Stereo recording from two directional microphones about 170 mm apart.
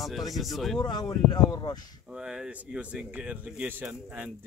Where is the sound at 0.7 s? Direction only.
25° left (ahead or behind).